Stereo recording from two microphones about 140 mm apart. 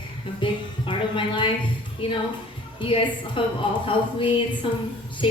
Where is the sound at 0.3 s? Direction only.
35° left (ahead or behind).